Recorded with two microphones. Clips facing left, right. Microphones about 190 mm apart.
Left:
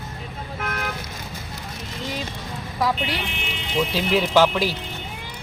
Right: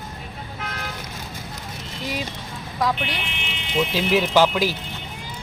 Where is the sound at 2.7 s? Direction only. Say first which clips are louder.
Even; 5° left (ahead or behind).